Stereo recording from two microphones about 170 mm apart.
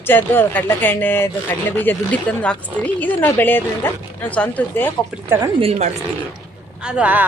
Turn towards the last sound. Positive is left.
turn(degrees=-5)  # may be behind; listen again after turning